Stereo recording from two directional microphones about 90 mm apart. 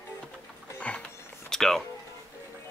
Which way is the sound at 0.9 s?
15° left (ahead or behind).